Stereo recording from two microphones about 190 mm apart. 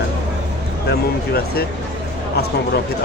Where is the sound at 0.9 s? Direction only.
55° left (ahead or behind).